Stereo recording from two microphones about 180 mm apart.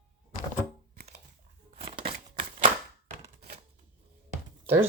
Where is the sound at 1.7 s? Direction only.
30° right (ahead or behind).